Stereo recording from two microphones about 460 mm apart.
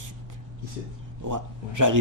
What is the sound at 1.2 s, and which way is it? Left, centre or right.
Speech, right.